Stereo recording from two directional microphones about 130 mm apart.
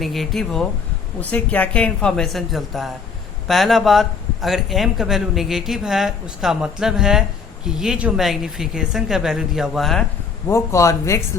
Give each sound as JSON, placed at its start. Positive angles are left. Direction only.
{"t": 0.0, "sound": "a man's voice", "side_deg": 0}
{"t": 1.2, "sound": "a woman's voice", "side_deg": 10}
{"t": 10.5, "sound": "a man's voice", "side_deg": 25}